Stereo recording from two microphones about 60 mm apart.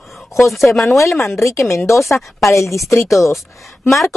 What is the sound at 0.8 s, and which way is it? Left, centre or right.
Speech, left.